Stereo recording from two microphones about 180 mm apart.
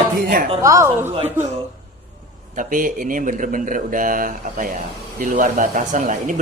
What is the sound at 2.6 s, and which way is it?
Speech, 50° right (ahead or behind).